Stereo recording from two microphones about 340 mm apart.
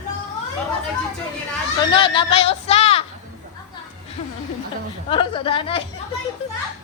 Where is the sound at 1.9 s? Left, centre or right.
Centre.